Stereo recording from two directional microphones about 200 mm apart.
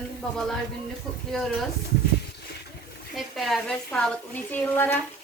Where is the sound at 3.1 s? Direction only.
Centre (ahead or behind).